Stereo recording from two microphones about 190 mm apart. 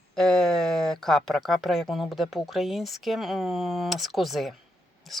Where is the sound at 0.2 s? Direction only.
Centre (ahead or behind).